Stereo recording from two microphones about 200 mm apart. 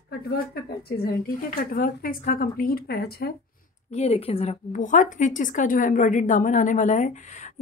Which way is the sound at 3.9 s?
30° left (ahead or behind).